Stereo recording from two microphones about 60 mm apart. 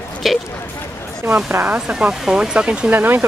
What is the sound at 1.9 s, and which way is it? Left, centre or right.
Speech, centre.